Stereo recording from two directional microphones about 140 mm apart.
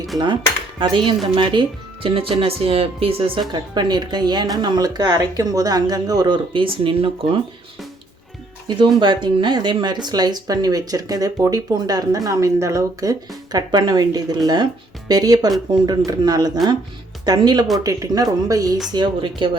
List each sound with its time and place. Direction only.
0.8 s speech: 35° right (ahead or behind)
3.5 s speech: 30° right (ahead or behind)
8.6 s speech: 35° right (ahead or behind)